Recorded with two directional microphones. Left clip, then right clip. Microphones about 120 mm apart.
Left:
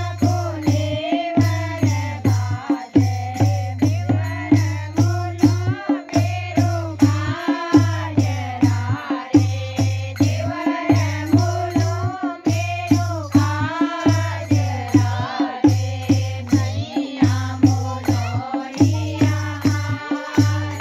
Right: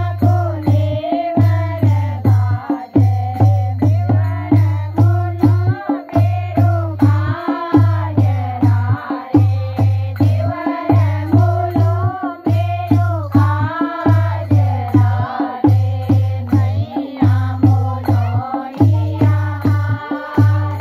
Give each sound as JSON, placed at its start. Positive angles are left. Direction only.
{"t": 0.2, "sound": "music", "side_deg": 5}
{"t": 5.4, "sound": "music", "side_deg": 35}
{"t": 8.2, "sound": "music", "side_deg": 35}
{"t": 10.1, "sound": "music", "side_deg": 35}